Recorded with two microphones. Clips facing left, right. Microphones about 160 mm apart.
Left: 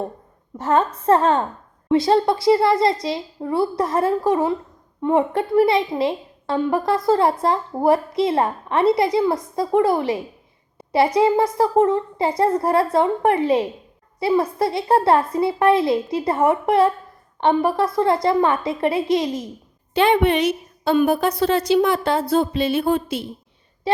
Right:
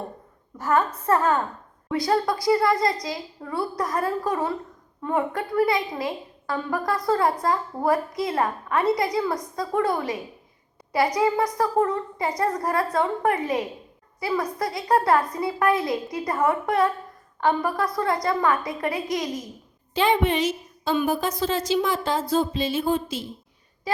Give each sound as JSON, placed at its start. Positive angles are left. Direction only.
{"t": 0.6, "sound": "a woman's voice", "side_deg": 30}
{"t": 19.9, "sound": "a woman's voice", "side_deg": 65}
{"t": 23.9, "sound": "a woman's voice", "side_deg": 30}